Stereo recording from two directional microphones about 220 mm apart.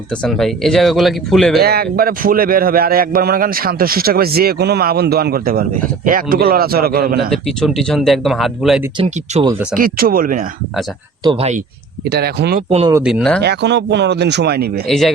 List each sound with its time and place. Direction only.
0.2 s speech: centre (ahead or behind)
1.6 s a man's voice: 45° right (ahead or behind)
7.3 s speech: centre (ahead or behind)
9.0 s speech: 25° right (ahead or behind)
9.7 s speech: 40° right (ahead or behind)
11.2 s speech: 25° right (ahead or behind)
12.0 s a man's voice: 50° right (ahead or behind)
12.9 s speech: 5° right (ahead or behind)
13.4 s a man's voice: 50° right (ahead or behind)
14.8 s speech: centre (ahead or behind)